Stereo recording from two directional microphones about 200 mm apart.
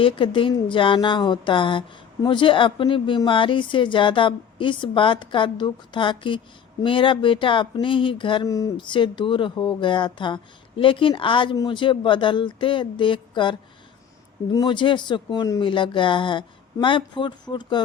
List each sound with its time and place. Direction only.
0.0 s speech: 25° left (ahead or behind)